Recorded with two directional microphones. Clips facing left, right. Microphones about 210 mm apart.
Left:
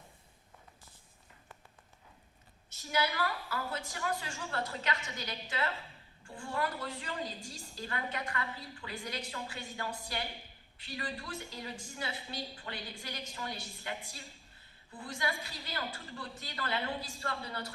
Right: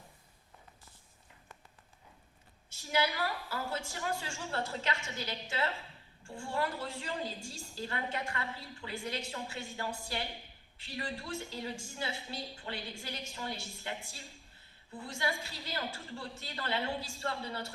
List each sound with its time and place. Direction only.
2.7 s a woman's voice: 25° right (ahead or behind)